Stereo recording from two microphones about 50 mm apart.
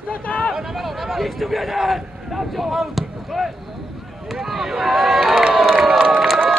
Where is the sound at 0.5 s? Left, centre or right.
Centre.